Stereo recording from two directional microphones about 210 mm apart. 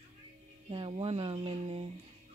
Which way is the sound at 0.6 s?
25° right (ahead or behind).